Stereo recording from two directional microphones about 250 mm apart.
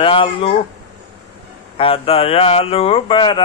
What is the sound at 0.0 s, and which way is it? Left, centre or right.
Speech, left.